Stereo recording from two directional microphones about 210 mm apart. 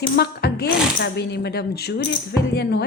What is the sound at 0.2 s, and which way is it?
A woman's voice, 50° left (ahead or behind).